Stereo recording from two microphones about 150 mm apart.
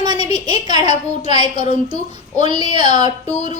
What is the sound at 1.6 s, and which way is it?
Speech, 45° left (ahead or behind).